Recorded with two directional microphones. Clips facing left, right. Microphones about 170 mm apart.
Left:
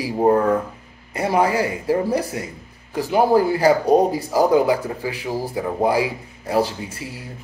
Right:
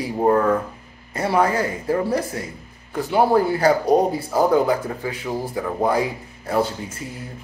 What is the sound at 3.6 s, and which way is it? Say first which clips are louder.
Speech: left 2 dB; 10° left (ahead or behind).